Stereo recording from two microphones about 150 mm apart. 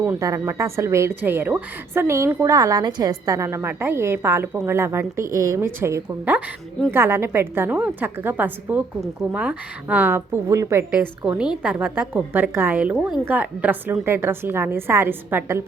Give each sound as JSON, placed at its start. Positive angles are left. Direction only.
{"t": 0.0, "sound": "a woman's voice", "side_deg": -20}